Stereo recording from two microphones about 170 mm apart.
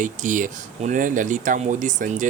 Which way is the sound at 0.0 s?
50° right (ahead or behind).